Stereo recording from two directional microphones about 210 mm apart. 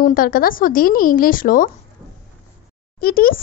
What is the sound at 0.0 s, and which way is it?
A woman's voice, 40° left (ahead or behind).